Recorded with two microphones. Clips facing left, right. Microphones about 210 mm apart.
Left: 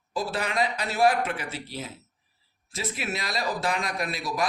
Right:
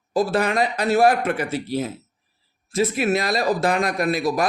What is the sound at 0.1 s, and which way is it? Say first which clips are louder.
Speech: right 9 dB; 50° right (ahead or behind).